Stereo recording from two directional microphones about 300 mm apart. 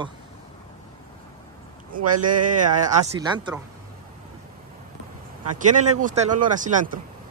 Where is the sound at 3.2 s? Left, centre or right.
Centre.